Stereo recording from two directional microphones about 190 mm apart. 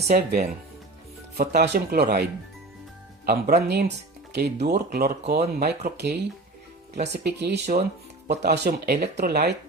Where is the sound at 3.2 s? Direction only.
50° right (ahead or behind).